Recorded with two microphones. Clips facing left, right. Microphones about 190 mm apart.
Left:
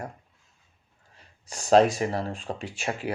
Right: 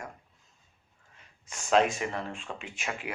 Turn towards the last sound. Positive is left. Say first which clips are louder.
# left 6 dB
turn(degrees=35)  # may be behind; listen again after turning